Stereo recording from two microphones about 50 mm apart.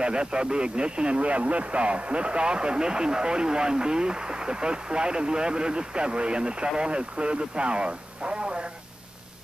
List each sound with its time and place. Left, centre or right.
0.0 s speech: centre